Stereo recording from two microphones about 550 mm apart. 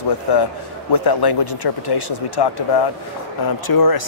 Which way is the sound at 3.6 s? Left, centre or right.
Left.